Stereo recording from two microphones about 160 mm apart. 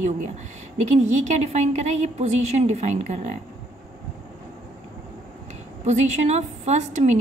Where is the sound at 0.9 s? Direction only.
45° right (ahead or behind).